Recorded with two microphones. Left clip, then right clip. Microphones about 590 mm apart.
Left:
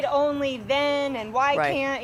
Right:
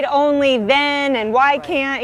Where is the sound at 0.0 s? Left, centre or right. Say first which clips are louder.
Right 8 dB; right.